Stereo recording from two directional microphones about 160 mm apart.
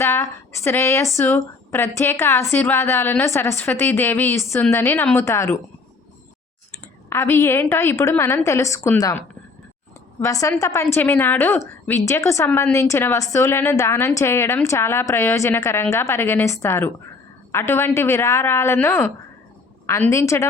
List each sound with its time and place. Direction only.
0.0 s a woman's voice: 15° left (ahead or behind)
7.1 s a woman's voice: 15° left (ahead or behind)